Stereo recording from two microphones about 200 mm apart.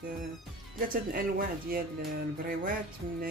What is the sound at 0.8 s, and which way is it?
Speech, 45° right (ahead or behind).